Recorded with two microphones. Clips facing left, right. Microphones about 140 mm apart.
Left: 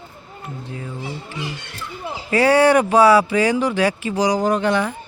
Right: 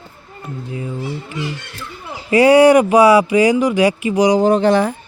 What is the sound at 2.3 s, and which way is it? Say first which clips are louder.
Speech: right 5 dB; 15° right (ahead or behind).